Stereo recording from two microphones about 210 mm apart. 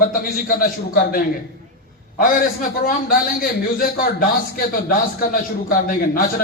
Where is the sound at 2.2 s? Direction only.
45° left (ahead or behind).